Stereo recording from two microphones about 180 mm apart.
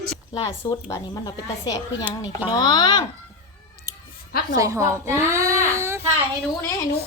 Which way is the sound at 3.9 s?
20° right (ahead or behind).